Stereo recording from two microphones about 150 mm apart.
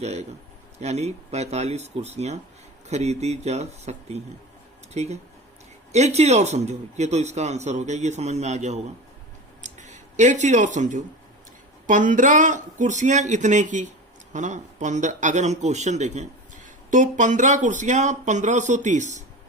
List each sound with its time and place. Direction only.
0.0 s speech: 50° right (ahead or behind)